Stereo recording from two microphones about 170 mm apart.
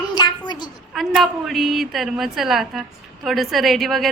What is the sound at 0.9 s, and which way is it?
A woman's voice, centre (ahead or behind).